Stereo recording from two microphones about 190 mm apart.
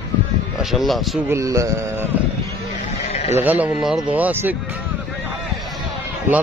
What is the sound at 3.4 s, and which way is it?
A man's voice, 10° right (ahead or behind).